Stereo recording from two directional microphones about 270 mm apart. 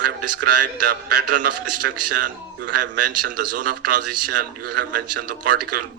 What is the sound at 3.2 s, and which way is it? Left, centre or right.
Speech, right.